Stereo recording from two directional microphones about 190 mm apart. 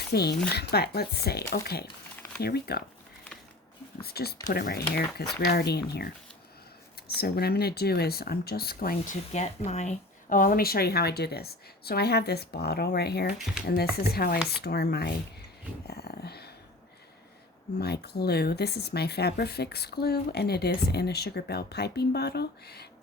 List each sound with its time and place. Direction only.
0.1 s speech: 60° left (ahead or behind)
4.0 s speech: 55° left (ahead or behind)
9.3 s speech: 35° left (ahead or behind); by 15.1 s 55° left (ahead or behind)
15.9 s dog: 55° left (ahead or behind)
17.7 s speech: 60° left (ahead or behind)